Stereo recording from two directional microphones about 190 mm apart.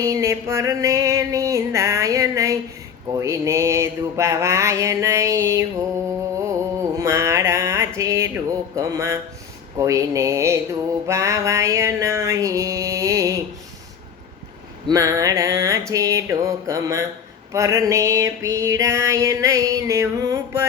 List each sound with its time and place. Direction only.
0.0 s music: 15° right (ahead or behind)
11.0 s mantra: 15° right (ahead or behind)
14.8 s music: 15° right (ahead or behind)